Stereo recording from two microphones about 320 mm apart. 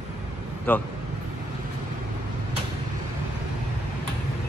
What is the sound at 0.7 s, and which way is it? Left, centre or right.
Speech, centre.